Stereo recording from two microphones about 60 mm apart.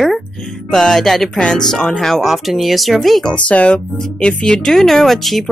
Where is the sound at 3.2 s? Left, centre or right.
Left.